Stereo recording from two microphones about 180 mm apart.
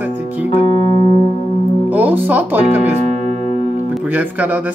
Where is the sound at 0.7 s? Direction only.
30° left (ahead or behind).